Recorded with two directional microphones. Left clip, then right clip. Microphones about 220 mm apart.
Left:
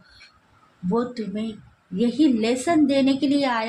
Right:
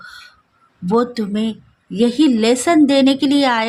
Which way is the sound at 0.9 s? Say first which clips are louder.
Right 8 dB; 40° right (ahead or behind).